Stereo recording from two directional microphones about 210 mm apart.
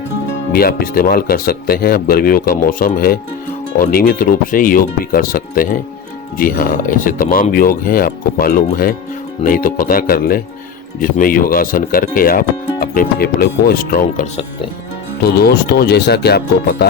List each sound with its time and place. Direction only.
0.5 s speech: 45° left (ahead or behind)